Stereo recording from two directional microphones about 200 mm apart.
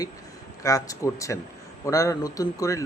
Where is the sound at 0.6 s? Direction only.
15° left (ahead or behind).